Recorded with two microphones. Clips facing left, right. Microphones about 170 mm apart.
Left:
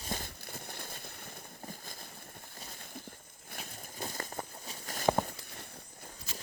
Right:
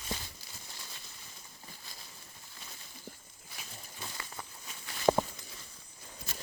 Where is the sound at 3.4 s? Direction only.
55° left (ahead or behind).